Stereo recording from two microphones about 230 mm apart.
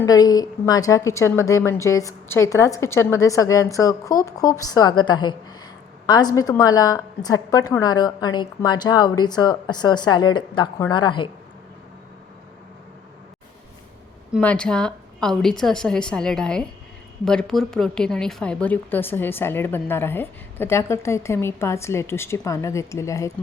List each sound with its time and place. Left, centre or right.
0.0 s a woman's voice: centre
14.3 s a woman's voice: centre